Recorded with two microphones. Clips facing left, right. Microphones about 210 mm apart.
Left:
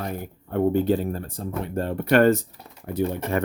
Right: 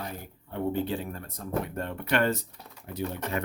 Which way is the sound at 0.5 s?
45° left (ahead or behind).